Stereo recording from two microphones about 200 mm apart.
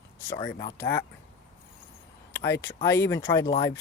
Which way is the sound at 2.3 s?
15° left (ahead or behind).